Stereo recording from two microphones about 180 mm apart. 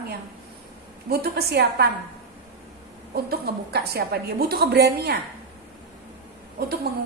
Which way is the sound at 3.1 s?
60° right (ahead or behind).